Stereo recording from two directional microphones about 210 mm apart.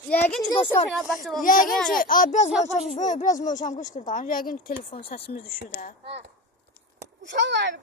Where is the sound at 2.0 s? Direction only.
40° left (ahead or behind).